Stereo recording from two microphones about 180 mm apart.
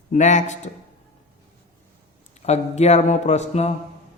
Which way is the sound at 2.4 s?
35° left (ahead or behind).